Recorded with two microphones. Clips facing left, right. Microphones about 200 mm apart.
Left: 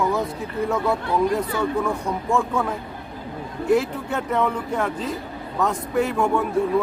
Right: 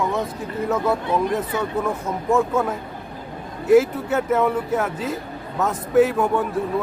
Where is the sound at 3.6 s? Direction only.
5° right (ahead or behind).